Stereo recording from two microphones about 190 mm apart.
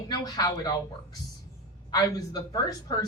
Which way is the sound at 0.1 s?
20° left (ahead or behind).